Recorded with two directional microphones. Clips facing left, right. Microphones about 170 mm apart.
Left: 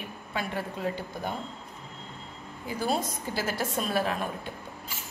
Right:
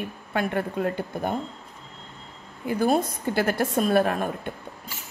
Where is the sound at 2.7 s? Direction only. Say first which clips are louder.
Right 7 dB; 55° right (ahead or behind).